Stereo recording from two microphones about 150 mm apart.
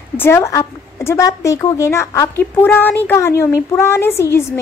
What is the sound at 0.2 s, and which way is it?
A woman's voice, 20° left (ahead or behind).